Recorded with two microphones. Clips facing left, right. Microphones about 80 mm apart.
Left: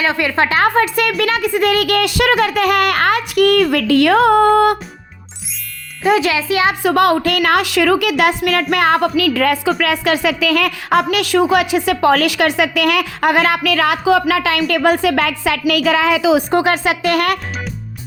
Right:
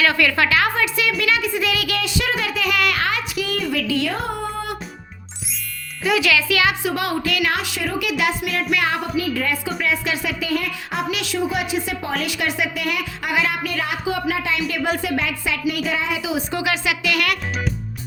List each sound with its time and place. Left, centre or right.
0.0 s a woman's voice: left
6.0 s speech: left
6.8 s a woman's voice: left
14.7 s speech: left
16.5 s a woman's voice: left